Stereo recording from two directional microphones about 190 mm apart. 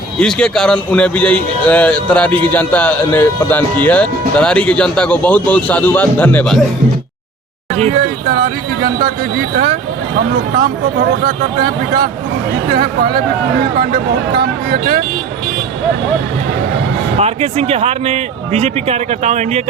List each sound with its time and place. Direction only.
0.2 s a man's voice: 5° left (ahead or behind)
8.3 s speech: 55° right (ahead or behind)
11.2 s speech: 50° right (ahead or behind)
17.2 s speech: 35° right (ahead or behind)